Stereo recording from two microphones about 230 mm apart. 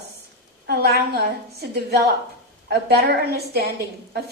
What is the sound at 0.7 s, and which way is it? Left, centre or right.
A woman's voice, right.